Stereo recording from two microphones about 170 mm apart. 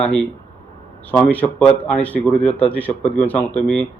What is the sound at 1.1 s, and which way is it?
Speech, 10° left (ahead or behind).